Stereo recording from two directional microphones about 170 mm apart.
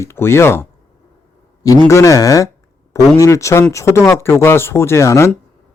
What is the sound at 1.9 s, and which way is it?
Speech, 20° left (ahead or behind).